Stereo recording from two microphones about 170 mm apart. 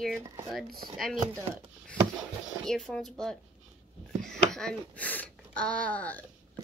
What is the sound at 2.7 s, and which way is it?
Speech, 5° left (ahead or behind).